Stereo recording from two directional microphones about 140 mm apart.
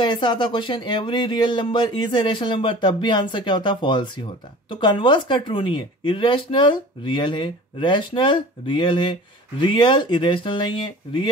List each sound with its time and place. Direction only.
0.0 s speech: 30° left (ahead or behind)